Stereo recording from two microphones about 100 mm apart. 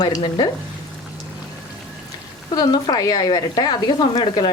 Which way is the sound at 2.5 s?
40° left (ahead or behind).